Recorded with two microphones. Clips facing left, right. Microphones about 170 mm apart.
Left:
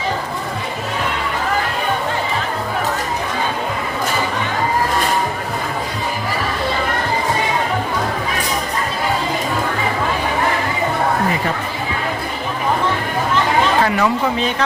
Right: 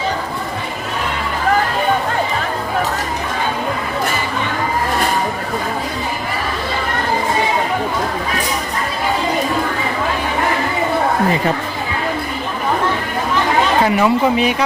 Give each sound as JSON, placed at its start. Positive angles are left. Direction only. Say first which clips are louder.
{"t": 13.8, "sound": "speech", "louder": "right 3 dB", "side_deg": -20}